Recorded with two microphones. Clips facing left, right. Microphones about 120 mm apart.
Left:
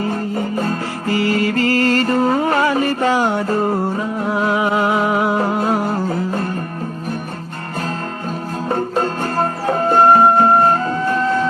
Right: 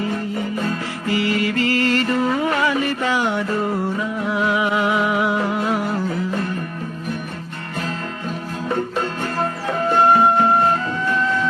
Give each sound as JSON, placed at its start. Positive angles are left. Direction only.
{"t": 0.0, "sound": "music", "side_deg": 40}
{"t": 8.7, "sound": "music", "side_deg": 40}